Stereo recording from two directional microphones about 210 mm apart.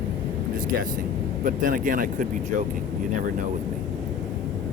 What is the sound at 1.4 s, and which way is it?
Speech, 40° right (ahead or behind).